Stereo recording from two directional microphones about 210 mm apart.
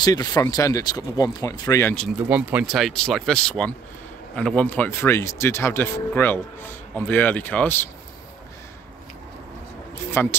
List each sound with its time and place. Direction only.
0.0 s speech: 20° left (ahead or behind)
2.1 s speech: 5° right (ahead or behind); by 7.9 s 10° left (ahead or behind)
10.2 s speech: 10° left (ahead or behind)